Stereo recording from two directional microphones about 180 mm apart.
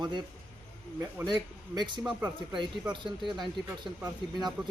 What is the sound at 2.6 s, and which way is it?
Speech, 25° right (ahead or behind).